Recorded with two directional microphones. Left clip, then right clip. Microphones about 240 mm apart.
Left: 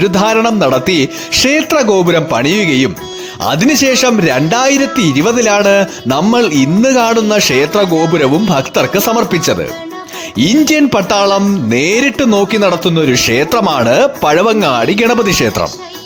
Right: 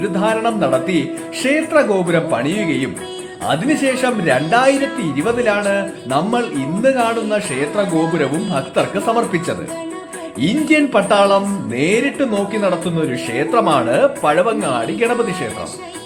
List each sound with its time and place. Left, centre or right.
0.0 s music: left